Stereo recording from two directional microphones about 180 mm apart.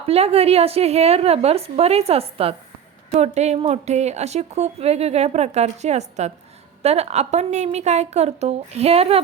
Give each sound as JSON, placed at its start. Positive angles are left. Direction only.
{"t": 0.0, "sound": "a woman's voice", "side_deg": -35}